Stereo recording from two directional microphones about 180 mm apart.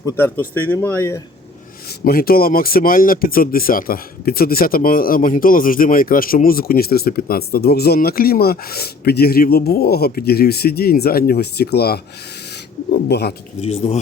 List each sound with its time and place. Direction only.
0.0 s speech: 15° left (ahead or behind)
2.0 s speech: 55° left (ahead or behind)
13.6 s speech: 35° left (ahead or behind)